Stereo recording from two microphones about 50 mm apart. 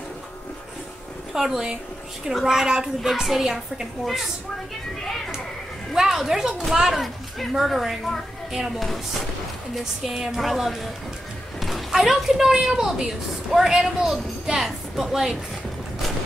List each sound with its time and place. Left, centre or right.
1.3 s a woman's voice: centre
5.9 s a woman's voice: centre